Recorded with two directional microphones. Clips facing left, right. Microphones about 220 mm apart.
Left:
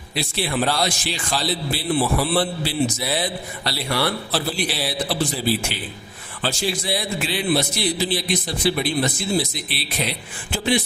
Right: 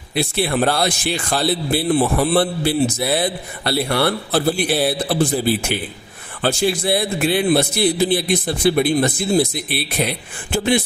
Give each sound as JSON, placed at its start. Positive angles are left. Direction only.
{"t": 0.1, "sound": "a man's voice", "side_deg": -55}